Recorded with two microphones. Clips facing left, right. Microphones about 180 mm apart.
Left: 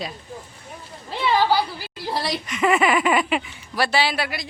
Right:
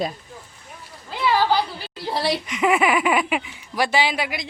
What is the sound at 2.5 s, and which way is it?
Speech, 10° right (ahead or behind).